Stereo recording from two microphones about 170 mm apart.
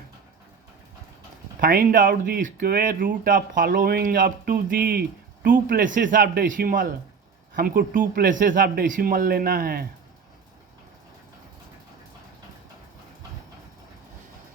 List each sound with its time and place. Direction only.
1.6 s speech: 60° right (ahead or behind)